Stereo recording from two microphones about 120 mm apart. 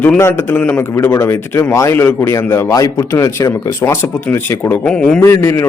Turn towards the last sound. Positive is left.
turn(degrees=20)  # may be behind; listen again after turning